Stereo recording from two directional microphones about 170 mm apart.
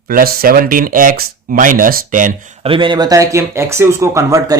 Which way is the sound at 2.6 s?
30° right (ahead or behind).